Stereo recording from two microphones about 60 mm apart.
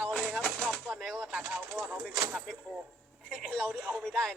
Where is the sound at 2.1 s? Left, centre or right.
Centre.